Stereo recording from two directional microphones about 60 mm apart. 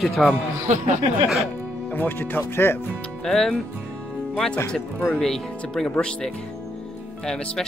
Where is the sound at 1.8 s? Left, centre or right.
Left.